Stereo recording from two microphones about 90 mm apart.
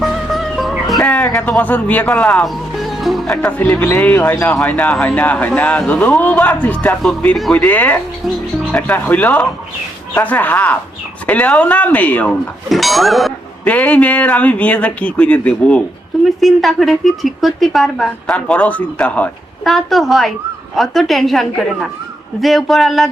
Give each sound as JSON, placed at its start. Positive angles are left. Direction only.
{"t": 0.0, "sound": "music", "side_deg": 0}
{"t": 1.0, "sound": "speech", "side_deg": 10}
{"t": 2.1, "sound": "speech", "side_deg": 5}
{"t": 3.4, "sound": "speech", "side_deg": 20}
{"t": 12.6, "sound": "a woman's voice", "side_deg": 0}
{"t": 13.7, "sound": "speech", "side_deg": 15}
{"t": 16.2, "sound": "a woman's voice", "side_deg": 0}
{"t": 18.3, "sound": "speech", "side_deg": 15}
{"t": 19.6, "sound": "a woman's voice", "side_deg": 0}